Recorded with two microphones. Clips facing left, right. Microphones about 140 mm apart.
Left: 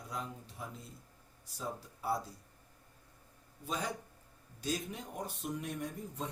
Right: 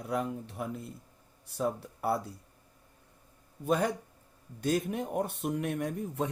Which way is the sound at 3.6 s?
60° right (ahead or behind).